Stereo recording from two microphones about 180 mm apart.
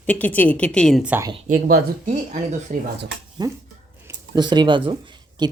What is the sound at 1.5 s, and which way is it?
Speech, 55° right (ahead or behind).